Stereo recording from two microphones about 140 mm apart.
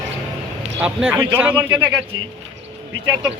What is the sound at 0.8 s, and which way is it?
A man's voice, 10° right (ahead or behind).